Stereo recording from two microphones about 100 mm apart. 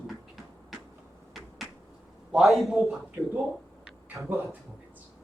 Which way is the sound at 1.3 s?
Centre (ahead or behind).